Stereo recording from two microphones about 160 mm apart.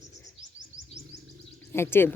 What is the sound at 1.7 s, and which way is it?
Speech, 15° left (ahead or behind).